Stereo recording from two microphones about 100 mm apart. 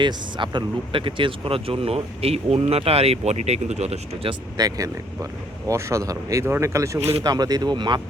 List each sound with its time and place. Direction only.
0.0 s speech: 50° right (ahead or behind); by 4.4 s 80° right
4.5 s speech: 40° right (ahead or behind)
7.3 s speech: 40° right (ahead or behind)